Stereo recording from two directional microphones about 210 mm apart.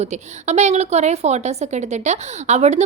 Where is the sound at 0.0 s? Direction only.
30° right (ahead or behind).